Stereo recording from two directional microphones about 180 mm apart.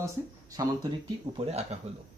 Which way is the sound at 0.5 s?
20° right (ahead or behind).